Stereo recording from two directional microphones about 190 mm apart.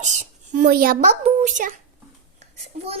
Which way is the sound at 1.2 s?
40° right (ahead or behind).